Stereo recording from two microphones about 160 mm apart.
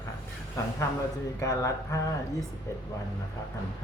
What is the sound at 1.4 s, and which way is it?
Speech, 20° left (ahead or behind).